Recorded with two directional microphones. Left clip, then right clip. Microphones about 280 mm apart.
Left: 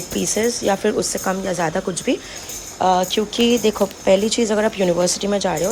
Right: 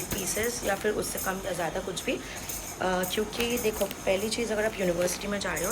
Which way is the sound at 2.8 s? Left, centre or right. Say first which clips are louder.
Left 12 dB; centre.